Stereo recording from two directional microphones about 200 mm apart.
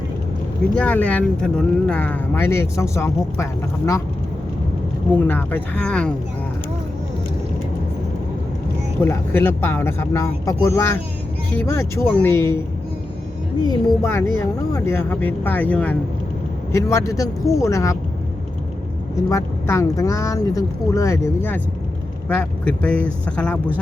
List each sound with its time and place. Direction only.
0.8 s speech: 5° left (ahead or behind)
5.1 s speech: 10° left (ahead or behind)
9.0 s speech: 10° left (ahead or behind)
13.7 s speech: 15° left (ahead or behind)
17.1 s speech: 15° left (ahead or behind)
19.3 s speech: 15° left (ahead or behind)